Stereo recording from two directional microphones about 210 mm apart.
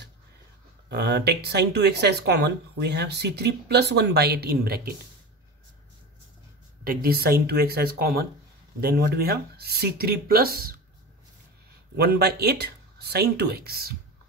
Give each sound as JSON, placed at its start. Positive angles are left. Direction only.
{"t": 0.8, "sound": "speech", "side_deg": -50}
{"t": 6.8, "sound": "speech", "side_deg": -45}
{"t": 12.0, "sound": "speech", "side_deg": -50}